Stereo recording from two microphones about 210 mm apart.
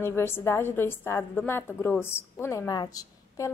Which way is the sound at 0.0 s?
10° left (ahead or behind).